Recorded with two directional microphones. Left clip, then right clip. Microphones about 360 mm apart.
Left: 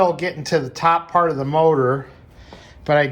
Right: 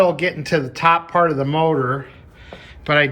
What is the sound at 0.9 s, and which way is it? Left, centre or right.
Speech, left.